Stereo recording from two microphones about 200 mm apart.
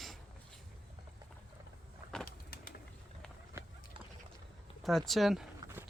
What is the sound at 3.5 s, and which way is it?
Horse, 10° right (ahead or behind).